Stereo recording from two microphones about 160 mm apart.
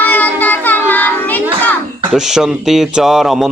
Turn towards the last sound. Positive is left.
turn(degrees=0)  # may be behind; listen again after turning